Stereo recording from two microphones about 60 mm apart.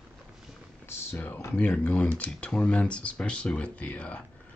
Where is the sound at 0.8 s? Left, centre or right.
Left.